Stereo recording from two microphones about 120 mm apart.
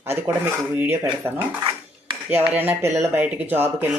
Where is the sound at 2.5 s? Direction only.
15° right (ahead or behind).